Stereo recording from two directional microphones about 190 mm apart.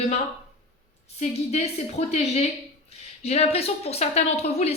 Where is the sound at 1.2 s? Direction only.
35° left (ahead or behind).